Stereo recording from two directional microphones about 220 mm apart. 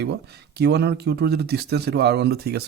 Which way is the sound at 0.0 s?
50° right (ahead or behind).